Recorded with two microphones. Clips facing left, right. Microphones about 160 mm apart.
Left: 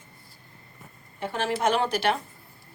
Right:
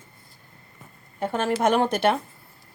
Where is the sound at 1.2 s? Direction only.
50° right (ahead or behind).